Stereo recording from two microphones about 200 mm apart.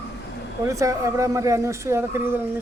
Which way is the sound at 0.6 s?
15° right (ahead or behind).